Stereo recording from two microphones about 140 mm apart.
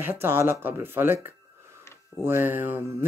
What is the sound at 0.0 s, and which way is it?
Speech, 15° right (ahead or behind).